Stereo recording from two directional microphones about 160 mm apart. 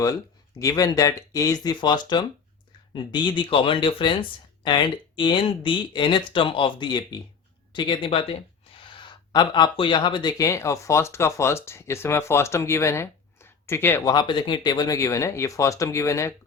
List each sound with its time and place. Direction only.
0.6 s speech: 25° left (ahead or behind)
14.0 s speech: 25° left (ahead or behind)